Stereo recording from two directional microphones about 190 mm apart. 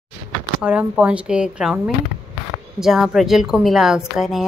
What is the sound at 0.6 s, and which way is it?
A woman's voice, 5° right (ahead or behind).